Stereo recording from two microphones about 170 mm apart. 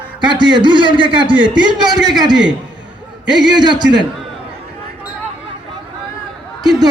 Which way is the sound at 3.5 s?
25° right (ahead or behind).